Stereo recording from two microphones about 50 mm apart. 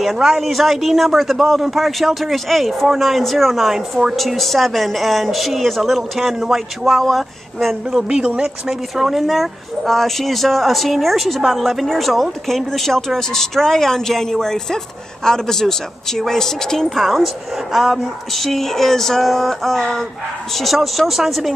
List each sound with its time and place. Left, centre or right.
0.0 s speech: centre
7.9 s speech: right
8.6 s speech: centre